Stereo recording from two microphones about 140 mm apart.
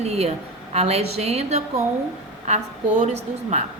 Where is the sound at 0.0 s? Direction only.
50° right (ahead or behind).